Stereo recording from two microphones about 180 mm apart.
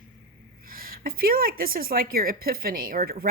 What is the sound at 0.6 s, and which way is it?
A woman's voice, 55° right (ahead or behind).